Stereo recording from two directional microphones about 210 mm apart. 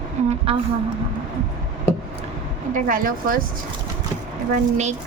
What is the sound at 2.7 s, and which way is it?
Speech, 40° right (ahead or behind).